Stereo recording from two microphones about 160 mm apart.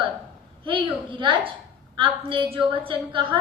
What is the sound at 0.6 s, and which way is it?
A woman's voice, 30° right (ahead or behind).